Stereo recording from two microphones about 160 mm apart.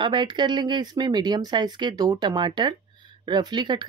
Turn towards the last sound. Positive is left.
turn(degrees=-25)  # may be behind; listen again after turning